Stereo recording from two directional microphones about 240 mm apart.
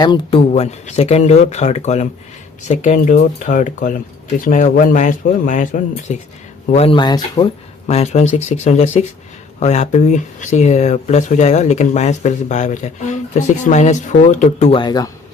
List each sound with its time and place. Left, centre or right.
0.0 s speech: left
7.9 s speech: left